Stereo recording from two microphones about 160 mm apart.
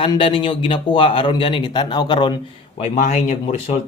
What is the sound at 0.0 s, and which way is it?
Speech, 35° left (ahead or behind).